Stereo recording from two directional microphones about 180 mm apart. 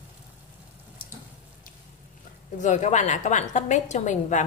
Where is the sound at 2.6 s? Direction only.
40° left (ahead or behind).